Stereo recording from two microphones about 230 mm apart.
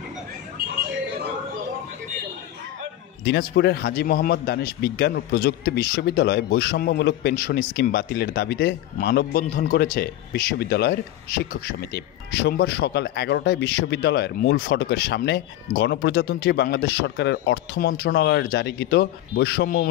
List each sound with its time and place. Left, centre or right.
3.3 s a man's voice: left